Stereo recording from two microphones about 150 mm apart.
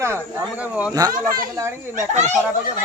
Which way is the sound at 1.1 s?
70° right (ahead or behind).